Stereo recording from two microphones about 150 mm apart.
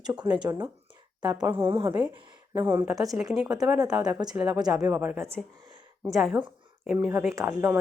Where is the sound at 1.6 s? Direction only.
40° right (ahead or behind).